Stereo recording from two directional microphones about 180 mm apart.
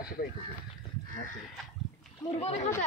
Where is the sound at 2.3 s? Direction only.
35° left (ahead or behind).